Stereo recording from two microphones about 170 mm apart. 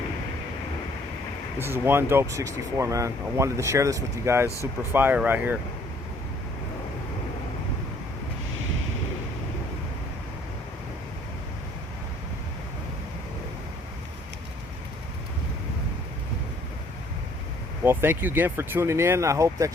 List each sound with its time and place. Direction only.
1.5 s speech: 15° right (ahead or behind)
17.8 s speech: 15° right (ahead or behind)